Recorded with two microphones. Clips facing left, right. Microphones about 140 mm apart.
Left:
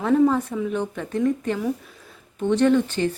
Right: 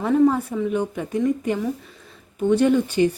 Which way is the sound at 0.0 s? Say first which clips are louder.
Right 1 dB; 5° right (ahead or behind).